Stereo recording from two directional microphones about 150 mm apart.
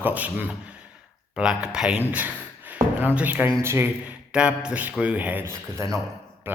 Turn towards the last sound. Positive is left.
turn(degrees=-15)  # may be behind; listen again after turning